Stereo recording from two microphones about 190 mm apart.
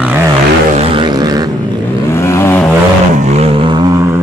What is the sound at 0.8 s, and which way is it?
Vehicle, 25° right (ahead or behind).